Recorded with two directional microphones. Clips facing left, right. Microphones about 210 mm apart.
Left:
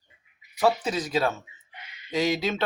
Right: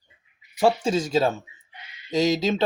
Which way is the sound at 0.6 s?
25° right (ahead or behind).